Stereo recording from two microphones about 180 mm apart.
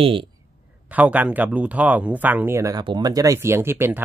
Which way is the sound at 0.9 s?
10° right (ahead or behind).